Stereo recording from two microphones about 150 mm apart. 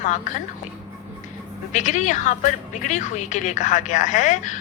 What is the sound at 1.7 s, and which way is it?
A woman's voice, 55° left (ahead or behind).